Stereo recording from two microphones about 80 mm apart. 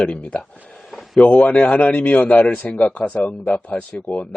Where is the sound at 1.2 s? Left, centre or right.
Centre.